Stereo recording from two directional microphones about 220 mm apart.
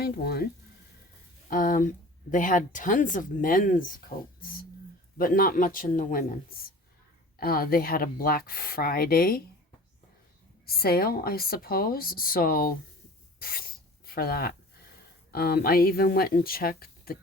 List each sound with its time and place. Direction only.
0.0 s a woman's voice: 45° left (ahead or behind)
1.5 s speech: 40° left (ahead or behind)
10.7 s a woman's voice: 45° left (ahead or behind)
13.4 s rub: 40° left (ahead or behind)
15.3 s a woman's voice: 45° left (ahead or behind)